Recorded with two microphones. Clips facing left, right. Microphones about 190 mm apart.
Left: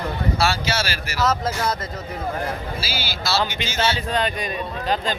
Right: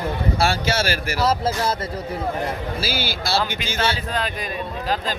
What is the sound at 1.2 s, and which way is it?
Speech, 30° right (ahead or behind).